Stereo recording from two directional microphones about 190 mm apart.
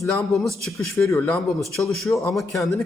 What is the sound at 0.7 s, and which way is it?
Speech, 15° left (ahead or behind).